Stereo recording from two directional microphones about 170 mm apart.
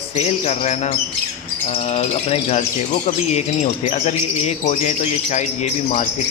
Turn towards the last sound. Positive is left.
turn(degrees=45)  # may be behind; listen again after turning